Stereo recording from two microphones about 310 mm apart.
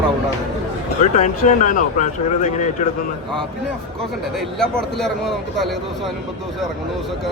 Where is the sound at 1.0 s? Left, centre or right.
Left.